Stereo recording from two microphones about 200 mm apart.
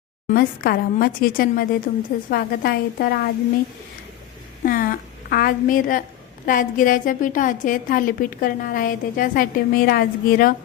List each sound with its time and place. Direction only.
0.3 s a woman's voice: 50° left (ahead or behind)
4.6 s a woman's voice: 45° left (ahead or behind)